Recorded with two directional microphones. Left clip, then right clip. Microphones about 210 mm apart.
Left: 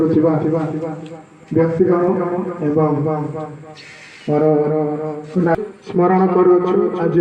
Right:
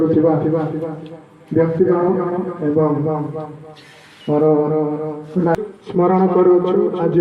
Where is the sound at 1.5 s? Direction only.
40° left (ahead or behind).